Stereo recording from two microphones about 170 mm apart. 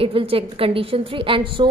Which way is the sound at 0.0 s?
35° right (ahead or behind).